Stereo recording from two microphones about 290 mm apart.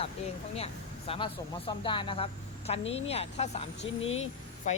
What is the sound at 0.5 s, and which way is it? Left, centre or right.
Speech, centre.